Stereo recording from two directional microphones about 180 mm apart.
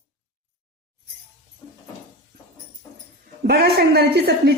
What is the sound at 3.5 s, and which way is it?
Speech, 60° right (ahead or behind).